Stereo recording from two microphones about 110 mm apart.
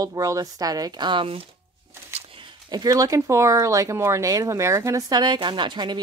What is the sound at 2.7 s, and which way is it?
Speech, 35° right (ahead or behind).